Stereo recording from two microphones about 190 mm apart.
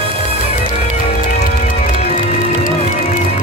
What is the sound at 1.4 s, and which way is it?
Music, 40° left (ahead or behind).